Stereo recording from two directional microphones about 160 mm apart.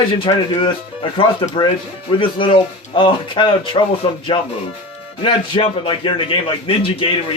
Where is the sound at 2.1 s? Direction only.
30° left (ahead or behind).